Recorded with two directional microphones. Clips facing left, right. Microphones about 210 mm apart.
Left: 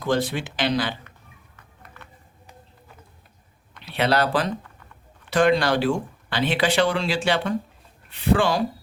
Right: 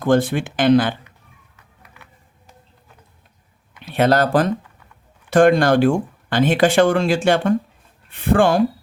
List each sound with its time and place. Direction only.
0.0 s speech: 50° right (ahead or behind)
1.8 s a sound: 10° right (ahead or behind)
3.8 s speech: 45° right (ahead or behind)